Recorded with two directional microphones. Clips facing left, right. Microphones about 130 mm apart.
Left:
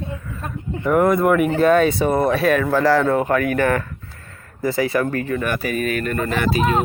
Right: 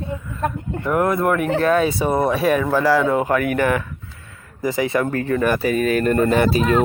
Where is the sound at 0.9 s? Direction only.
Centre (ahead or behind).